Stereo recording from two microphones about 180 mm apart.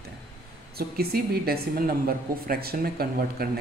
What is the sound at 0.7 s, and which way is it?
A woman's voice, 60° right (ahead or behind).